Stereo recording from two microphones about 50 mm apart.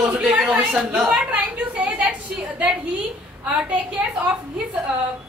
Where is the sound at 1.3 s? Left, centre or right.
Right.